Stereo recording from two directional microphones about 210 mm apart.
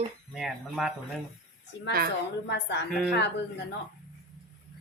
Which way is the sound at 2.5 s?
55° left (ahead or behind).